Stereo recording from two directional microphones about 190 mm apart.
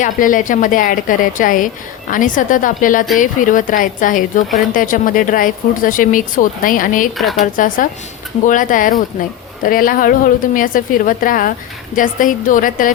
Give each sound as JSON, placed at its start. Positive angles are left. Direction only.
{"t": 0.0, "sound": "a woman's voice", "side_deg": 45}
{"t": 7.2, "sound": "speech", "side_deg": 0}
{"t": 7.5, "sound": "a woman's voice", "side_deg": 45}